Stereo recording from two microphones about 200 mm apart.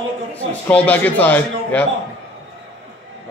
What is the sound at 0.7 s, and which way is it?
A man's voice, 10° left (ahead or behind).